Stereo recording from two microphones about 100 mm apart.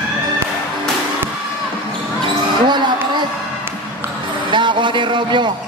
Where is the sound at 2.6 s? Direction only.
50° right (ahead or behind).